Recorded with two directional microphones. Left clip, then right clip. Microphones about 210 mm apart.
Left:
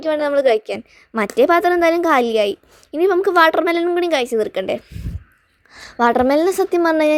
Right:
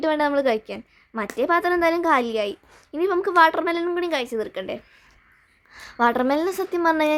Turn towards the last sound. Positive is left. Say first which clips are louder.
# left 5 dB
turn(degrees=20)  # may be behind; listen again after turning